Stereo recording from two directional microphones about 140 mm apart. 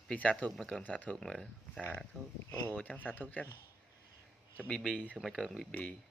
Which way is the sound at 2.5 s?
15° left (ahead or behind).